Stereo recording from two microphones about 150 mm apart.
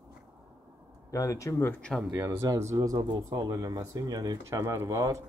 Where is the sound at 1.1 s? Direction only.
20° left (ahead or behind); by 2.0 s 5° left (ahead or behind).